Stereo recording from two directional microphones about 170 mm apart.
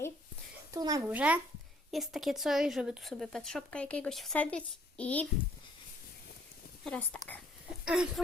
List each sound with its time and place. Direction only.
0.7 s a child's voice: 20° right (ahead or behind)
1.1 s a child's voice: 10° right (ahead or behind); by 5.3 s 10° left (ahead or behind)
6.8 s speech: 5° left (ahead or behind)